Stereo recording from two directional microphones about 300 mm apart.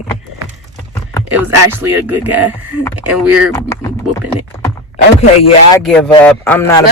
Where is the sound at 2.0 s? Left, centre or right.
Centre.